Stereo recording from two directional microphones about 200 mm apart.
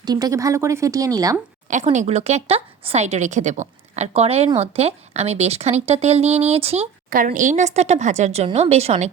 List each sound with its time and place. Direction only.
0.0 s a woman's voice: 20° right (ahead or behind)
1.6 s speech: 35° right (ahead or behind)
7.1 s speech: 45° right (ahead or behind)